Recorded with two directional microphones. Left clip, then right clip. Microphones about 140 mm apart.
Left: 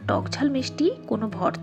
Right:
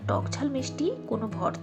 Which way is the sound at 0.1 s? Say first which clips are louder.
Left 5 dB; 35° left (ahead or behind).